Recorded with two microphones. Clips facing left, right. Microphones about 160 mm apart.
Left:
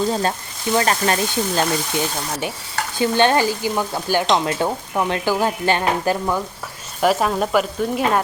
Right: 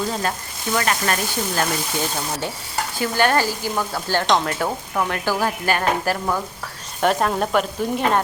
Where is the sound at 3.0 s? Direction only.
25° left (ahead or behind).